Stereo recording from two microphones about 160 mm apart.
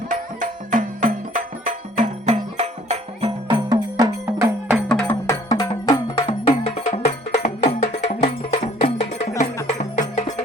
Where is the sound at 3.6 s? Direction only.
25° right (ahead or behind).